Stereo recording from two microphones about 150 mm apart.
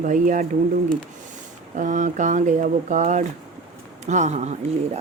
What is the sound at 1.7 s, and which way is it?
A woman's voice, 60° right (ahead or behind).